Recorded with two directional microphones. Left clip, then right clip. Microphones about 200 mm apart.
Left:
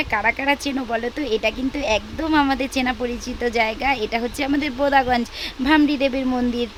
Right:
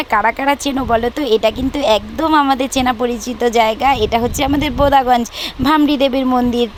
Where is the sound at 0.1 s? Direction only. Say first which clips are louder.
Right 8 dB; 20° right (ahead or behind).